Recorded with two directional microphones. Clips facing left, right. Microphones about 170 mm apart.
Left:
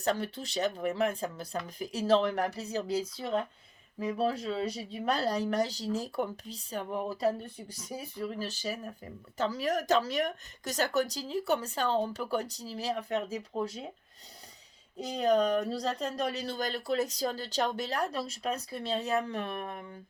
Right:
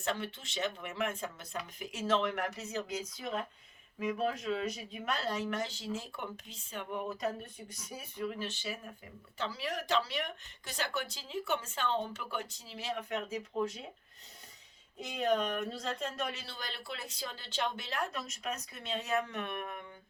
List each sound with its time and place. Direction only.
0.0 s speech: 40° left (ahead or behind)
14.9 s speech: 40° left (ahead or behind)